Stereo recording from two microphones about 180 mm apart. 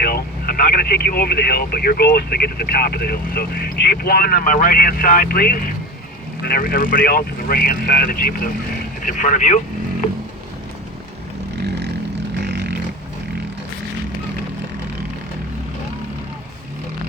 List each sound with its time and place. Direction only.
0.0 s speech: 55° left (ahead or behind)
11.6 s vehicle: 70° right (ahead or behind)